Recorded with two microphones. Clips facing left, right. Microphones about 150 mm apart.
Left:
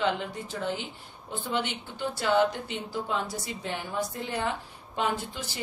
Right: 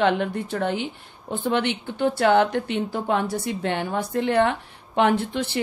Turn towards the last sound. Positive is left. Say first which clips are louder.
# right 11 dB
turn(degrees=-65)  # may be behind; listen again after turning